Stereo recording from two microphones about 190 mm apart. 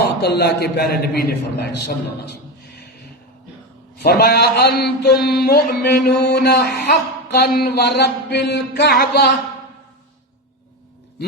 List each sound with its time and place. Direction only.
0.2 s music: 60° left (ahead or behind)
4.0 s music: 55° left (ahead or behind)